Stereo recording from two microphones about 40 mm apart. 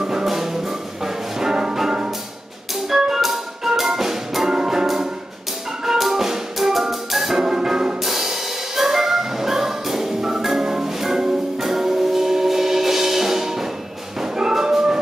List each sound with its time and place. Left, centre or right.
0.0 s music: centre
2.9 s music: centre
14.2 s dog: centre